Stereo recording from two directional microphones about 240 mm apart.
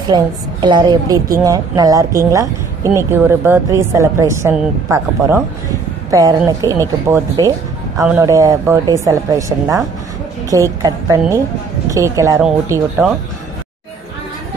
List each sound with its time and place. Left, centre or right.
0.0 s speech: centre